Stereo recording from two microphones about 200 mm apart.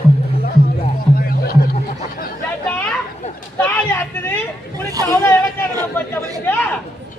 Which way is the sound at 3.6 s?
10° left (ahead or behind).